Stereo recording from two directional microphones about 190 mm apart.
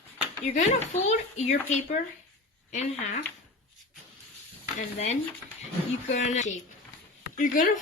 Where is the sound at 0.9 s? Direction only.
35° left (ahead or behind).